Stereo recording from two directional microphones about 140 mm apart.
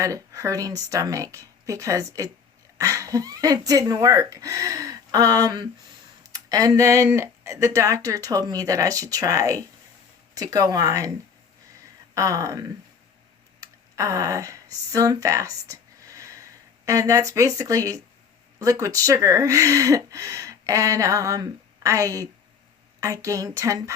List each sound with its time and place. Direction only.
0.0 s speech: 20° right (ahead or behind)
12.1 s speech: 25° right (ahead or behind)